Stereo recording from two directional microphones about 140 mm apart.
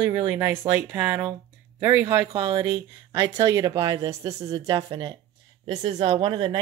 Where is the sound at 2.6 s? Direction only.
35° right (ahead or behind).